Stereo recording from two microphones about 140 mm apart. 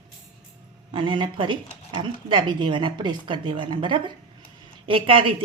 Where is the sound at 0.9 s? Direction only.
35° right (ahead or behind).